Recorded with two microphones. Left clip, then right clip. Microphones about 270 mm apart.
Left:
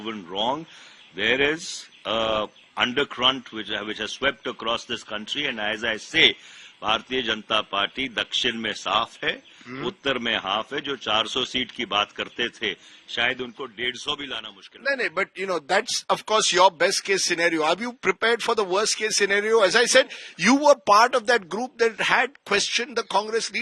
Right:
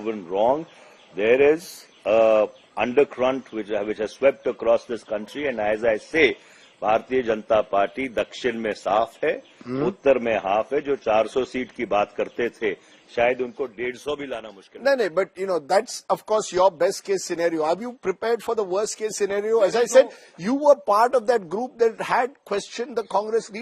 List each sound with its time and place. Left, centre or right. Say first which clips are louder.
0.0 s a man's voice: right 5 dB; left
14.8 s speech: right 4 dB; centre
15.5 s a man's voice: right 2 dB; centre
21.1 s speech: right 1 dB; centre